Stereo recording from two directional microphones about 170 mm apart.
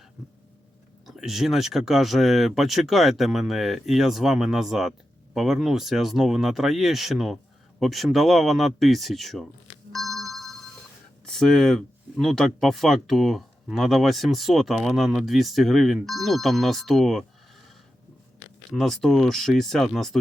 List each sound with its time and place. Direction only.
1.0 s speech: centre (ahead or behind)
9.9 s a sound: centre (ahead or behind)
11.3 s speech: 5° left (ahead or behind)
18.7 s speech: centre (ahead or behind)